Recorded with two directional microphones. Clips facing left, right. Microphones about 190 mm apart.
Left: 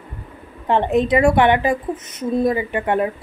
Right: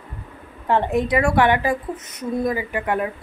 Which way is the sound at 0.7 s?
20° left (ahead or behind).